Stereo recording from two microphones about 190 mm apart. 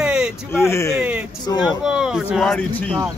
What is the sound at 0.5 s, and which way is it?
Speech, 15° left (ahead or behind).